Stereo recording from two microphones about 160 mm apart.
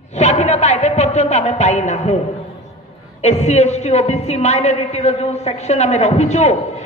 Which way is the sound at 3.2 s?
45° left (ahead or behind).